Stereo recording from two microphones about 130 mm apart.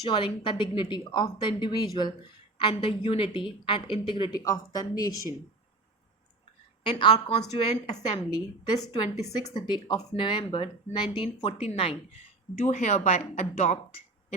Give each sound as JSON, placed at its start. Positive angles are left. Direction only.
{"t": 0.0, "sound": "a woman's voice", "side_deg": 40}
{"t": 6.8, "sound": "a woman's voice", "side_deg": 40}
{"t": 7.5, "sound": "a woman's voice", "side_deg": 55}
{"t": 8.3, "sound": "a woman's voice", "side_deg": 35}
{"t": 11.6, "sound": "speech", "side_deg": 50}
{"t": 12.5, "sound": "a woman's voice", "side_deg": 60}